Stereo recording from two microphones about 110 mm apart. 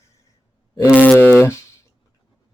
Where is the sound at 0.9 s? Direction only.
15° left (ahead or behind).